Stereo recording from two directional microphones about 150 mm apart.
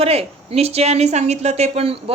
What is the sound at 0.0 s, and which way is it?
A woman's voice, 40° right (ahead or behind).